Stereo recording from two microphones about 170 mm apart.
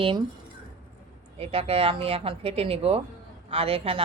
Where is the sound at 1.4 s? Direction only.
35° right (ahead or behind).